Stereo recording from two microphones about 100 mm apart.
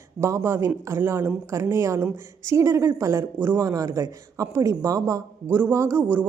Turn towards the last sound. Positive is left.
turn(degrees=-20)  # may be behind; listen again after turning